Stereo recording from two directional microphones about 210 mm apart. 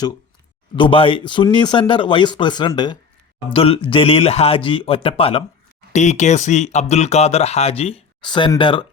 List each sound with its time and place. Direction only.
0.8 s speech: 25° left (ahead or behind)